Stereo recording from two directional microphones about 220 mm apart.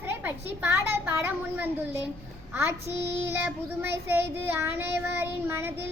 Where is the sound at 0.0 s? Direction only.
10° right (ahead or behind).